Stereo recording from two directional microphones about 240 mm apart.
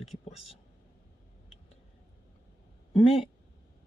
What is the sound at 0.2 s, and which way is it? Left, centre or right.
Speech, left.